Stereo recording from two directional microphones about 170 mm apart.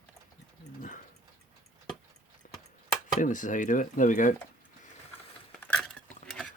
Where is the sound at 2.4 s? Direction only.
50° left (ahead or behind).